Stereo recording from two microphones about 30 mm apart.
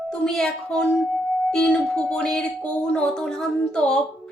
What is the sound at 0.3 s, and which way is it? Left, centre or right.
Speech, centre.